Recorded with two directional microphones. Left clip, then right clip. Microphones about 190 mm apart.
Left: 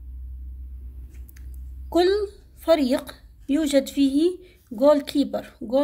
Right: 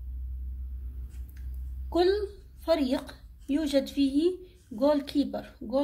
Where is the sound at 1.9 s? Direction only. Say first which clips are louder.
Left 5 dB; 35° left (ahead or behind).